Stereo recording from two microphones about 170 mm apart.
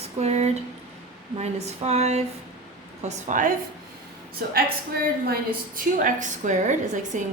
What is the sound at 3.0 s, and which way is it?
Speech, 50° right (ahead or behind).